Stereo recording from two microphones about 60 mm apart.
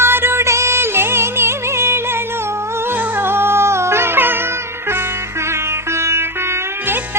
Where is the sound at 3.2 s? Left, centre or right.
Right.